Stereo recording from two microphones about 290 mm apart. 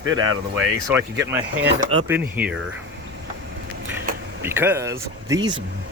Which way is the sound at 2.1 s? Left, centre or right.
Centre.